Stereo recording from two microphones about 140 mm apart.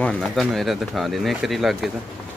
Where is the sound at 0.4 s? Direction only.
Centre (ahead or behind).